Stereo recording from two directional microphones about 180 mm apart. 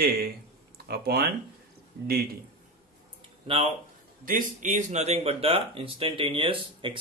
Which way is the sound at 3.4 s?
30° right (ahead or behind).